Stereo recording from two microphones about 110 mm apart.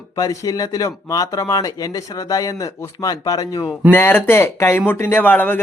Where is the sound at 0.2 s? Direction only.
35° left (ahead or behind).